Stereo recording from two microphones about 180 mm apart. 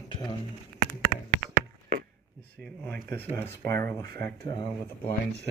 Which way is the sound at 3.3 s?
15° left (ahead or behind).